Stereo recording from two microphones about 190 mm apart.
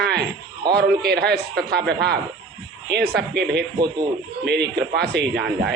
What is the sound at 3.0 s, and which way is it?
Speech, 60° right (ahead or behind).